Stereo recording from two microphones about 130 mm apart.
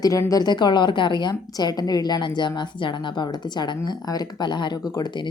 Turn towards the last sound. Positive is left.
turn(degrees=35)  # may be behind; listen again after turning